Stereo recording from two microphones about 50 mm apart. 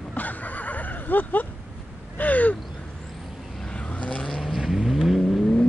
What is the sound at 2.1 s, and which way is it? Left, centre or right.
Gasp, left.